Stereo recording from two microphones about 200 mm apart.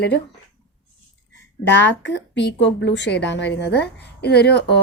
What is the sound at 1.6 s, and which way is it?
A woman's voice, 60° left (ahead or behind).